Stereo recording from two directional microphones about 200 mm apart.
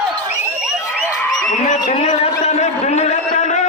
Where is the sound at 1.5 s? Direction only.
35° left (ahead or behind).